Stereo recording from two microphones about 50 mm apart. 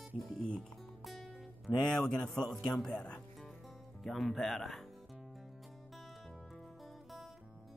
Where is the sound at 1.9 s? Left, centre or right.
Centre.